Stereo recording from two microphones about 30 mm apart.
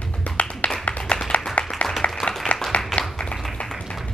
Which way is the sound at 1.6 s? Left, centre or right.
Left.